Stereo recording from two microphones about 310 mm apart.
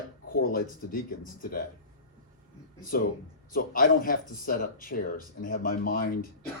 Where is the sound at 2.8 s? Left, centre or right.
Left.